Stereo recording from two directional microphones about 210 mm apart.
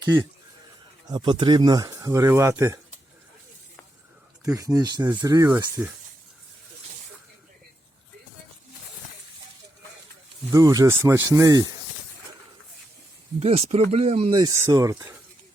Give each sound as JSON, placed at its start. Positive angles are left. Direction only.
{"t": 0.0, "sound": "speech", "side_deg": -15}
{"t": 4.4, "sound": "speech", "side_deg": -15}
{"t": 10.5, "sound": "speech", "side_deg": -15}
{"t": 13.4, "sound": "speech", "side_deg": -30}